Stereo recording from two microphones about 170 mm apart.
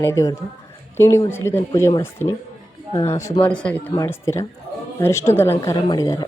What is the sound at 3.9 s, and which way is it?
A woman's voice, 20° left (ahead or behind).